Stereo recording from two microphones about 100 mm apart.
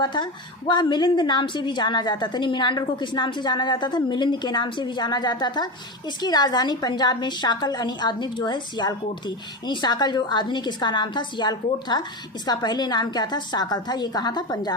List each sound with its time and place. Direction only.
0.0 s a woman's voice: 50° left (ahead or behind)